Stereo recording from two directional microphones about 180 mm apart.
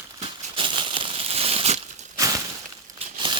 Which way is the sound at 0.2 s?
30° right (ahead or behind).